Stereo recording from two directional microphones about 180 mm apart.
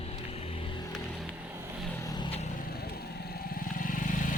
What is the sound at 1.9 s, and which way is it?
Vehicle, 20° left (ahead or behind).